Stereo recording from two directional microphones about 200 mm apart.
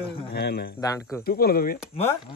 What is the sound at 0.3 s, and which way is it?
Speech, 55° left (ahead or behind).